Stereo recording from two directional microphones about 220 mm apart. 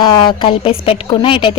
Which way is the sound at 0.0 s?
20° left (ahead or behind).